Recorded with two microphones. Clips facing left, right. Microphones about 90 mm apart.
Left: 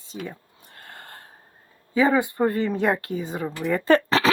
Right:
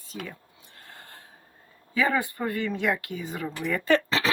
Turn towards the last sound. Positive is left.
turn(degrees=60)  # may be behind; listen again after turning